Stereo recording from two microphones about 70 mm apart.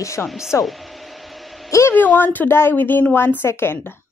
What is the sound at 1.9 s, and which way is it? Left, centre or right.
Speech, left.